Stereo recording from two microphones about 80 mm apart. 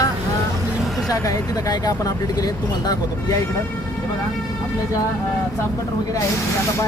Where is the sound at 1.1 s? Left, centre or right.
Left.